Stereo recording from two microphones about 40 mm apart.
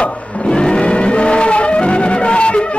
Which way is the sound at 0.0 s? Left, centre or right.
Left.